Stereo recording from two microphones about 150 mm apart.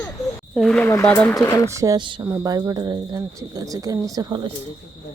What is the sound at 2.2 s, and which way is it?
Speech, 20° right (ahead or behind).